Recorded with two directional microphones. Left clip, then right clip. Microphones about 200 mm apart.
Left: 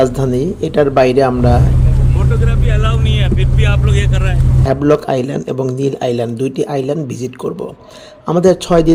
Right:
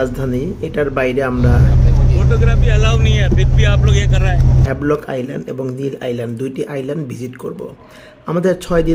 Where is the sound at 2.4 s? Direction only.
5° right (ahead or behind).